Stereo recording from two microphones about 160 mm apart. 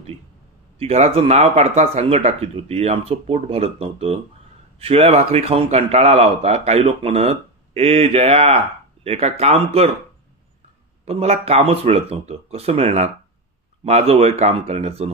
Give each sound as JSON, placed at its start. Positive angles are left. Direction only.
{"t": 0.7, "sound": "a man's voice", "side_deg": -40}
{"t": 11.1, "sound": "a man's voice", "side_deg": -40}